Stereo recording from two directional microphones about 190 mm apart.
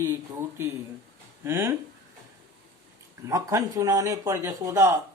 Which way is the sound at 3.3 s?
15° right (ahead or behind).